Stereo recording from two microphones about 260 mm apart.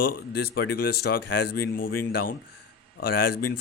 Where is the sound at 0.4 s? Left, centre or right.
Left.